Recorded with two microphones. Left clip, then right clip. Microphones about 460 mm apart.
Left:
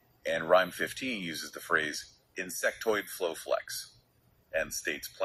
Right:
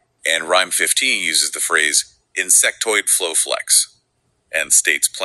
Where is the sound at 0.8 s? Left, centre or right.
Left.